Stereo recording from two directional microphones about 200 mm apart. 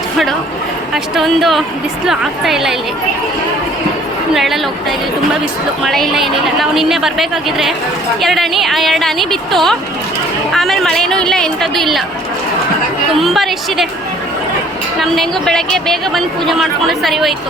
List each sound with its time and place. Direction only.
0.9 s a woman's voice: centre (ahead or behind)
4.4 s a woman's voice: centre (ahead or behind)
13.1 s a woman's voice: centre (ahead or behind)
15.0 s a woman's voice: centre (ahead or behind)